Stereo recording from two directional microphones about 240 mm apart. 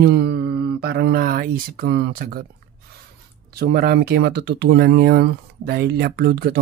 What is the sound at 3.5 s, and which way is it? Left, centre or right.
Speech, right.